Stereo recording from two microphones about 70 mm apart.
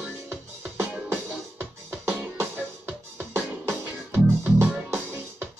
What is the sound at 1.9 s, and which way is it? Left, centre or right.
Music, right.